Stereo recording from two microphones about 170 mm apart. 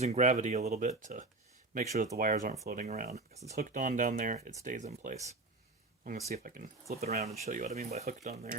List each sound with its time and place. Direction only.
0.0 s speech: 40° right (ahead or behind)
6.3 s speech: 60° right (ahead or behind)
7.0 s speech: 40° right (ahead or behind)